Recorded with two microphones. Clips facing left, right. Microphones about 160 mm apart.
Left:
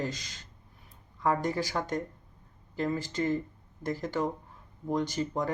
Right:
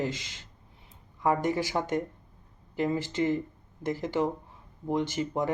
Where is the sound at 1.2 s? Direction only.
15° right (ahead or behind).